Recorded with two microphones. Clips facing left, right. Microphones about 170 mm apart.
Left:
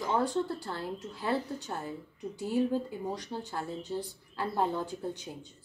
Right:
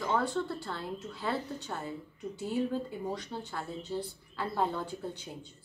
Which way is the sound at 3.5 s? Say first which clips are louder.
Left 2 dB; 15° left (ahead or behind).